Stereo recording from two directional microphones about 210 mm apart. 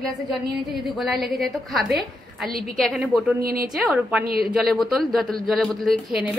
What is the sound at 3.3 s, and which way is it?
Speech, 45° right (ahead or behind).